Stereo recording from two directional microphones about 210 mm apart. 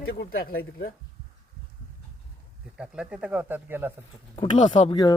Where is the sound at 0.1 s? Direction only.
45° left (ahead or behind).